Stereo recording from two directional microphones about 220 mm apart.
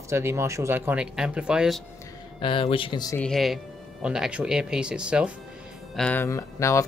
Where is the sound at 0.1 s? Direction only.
10° right (ahead or behind).